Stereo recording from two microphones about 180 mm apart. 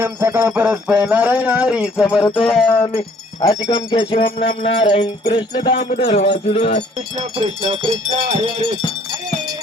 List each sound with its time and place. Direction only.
0.0 s jingle bell: 15° right (ahead or behind)
2.3 s music: 5° left (ahead or behind)
3.4 s music: 20° left (ahead or behind)
6.0 s a sound: 35° left (ahead or behind)
7.2 s wind chime: 35° right (ahead or behind)